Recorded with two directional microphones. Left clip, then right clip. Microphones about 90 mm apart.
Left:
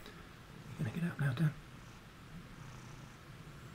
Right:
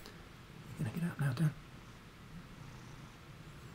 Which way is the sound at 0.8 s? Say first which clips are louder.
Left 1 dB; 20° right (ahead or behind).